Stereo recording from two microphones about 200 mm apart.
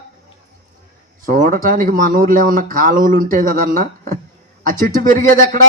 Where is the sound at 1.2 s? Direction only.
40° right (ahead or behind).